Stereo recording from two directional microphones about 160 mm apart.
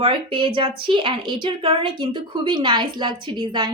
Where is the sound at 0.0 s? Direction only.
30° right (ahead or behind).